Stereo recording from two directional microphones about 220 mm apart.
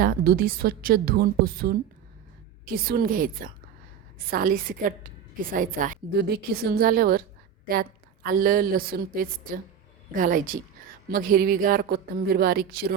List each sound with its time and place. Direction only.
0.0 s a woman's voice: 40° right (ahead or behind)